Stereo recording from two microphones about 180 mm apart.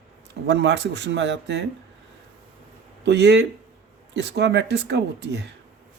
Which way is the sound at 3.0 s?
70° right (ahead or behind).